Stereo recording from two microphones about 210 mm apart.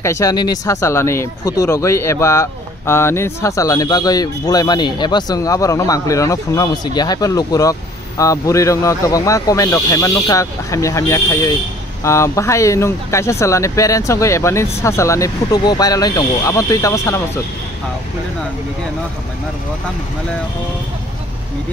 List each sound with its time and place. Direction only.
0.0 s speech: 15° left (ahead or behind)